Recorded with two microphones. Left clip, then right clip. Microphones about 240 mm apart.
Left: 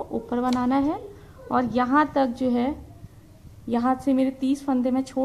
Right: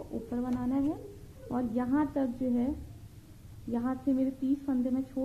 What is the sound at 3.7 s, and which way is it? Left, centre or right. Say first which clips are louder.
A woman's voice: left 9 dB; left.